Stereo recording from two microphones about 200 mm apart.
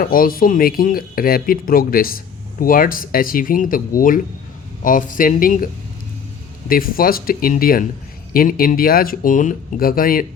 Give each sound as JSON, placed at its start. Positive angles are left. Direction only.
{"t": 0.0, "sound": "speech", "side_deg": 45}
{"t": 6.7, "sound": "speech", "side_deg": 45}